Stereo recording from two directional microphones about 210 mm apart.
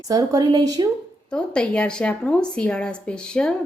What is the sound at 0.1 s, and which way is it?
Speech, 15° right (ahead or behind).